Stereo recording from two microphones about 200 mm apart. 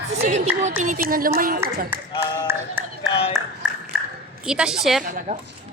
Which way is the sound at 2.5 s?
10° right (ahead or behind).